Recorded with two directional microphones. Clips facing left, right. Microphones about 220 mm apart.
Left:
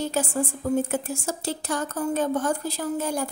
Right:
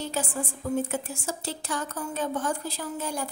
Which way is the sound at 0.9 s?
45° left (ahead or behind).